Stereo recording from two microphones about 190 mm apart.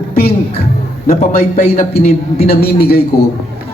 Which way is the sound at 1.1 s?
50° left (ahead or behind).